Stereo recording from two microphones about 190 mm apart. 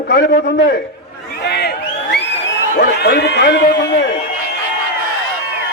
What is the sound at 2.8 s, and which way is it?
A man's voice, 55° left (ahead or behind).